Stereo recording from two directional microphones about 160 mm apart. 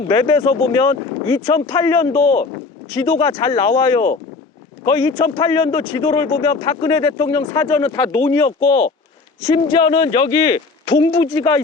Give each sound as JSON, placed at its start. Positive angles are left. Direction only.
{"t": 0.1, "sound": "a man's voice", "side_deg": 25}